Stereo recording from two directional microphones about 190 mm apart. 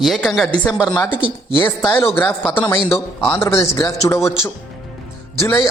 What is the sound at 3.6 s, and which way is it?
Speech, 20° left (ahead or behind).